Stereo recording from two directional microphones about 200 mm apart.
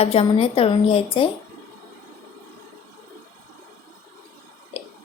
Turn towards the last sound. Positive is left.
turn(degrees=30)  # may be behind; listen again after turning